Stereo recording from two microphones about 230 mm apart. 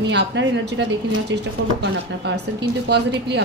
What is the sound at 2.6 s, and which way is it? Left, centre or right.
Speech, right.